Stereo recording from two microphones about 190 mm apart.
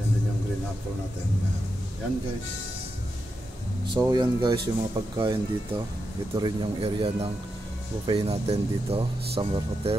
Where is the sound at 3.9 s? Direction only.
25° right (ahead or behind).